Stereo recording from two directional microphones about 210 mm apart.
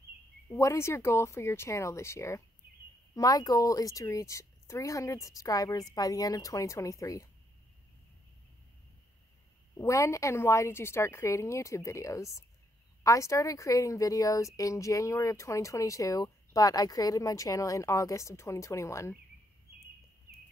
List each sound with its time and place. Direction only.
0.5 s a woman's voice: 15° left (ahead or behind)
9.8 s a woman's voice: 15° left (ahead or behind)